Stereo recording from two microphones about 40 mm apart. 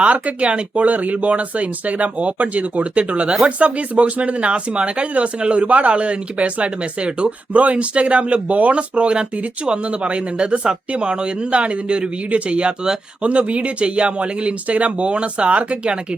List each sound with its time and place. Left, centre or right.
0.0 s speech: right